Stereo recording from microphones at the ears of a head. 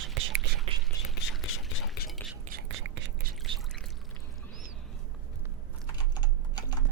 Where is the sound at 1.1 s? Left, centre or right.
Left.